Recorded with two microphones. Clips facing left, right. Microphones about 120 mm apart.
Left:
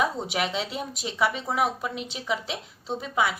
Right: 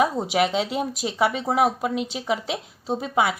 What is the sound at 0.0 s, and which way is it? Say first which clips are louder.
A woman's voice: right 6 dB; 45° right (ahead or behind).